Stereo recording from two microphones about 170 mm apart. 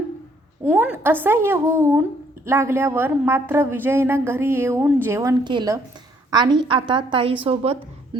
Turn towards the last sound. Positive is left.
turn(degrees=-35)  # may be behind; listen again after turning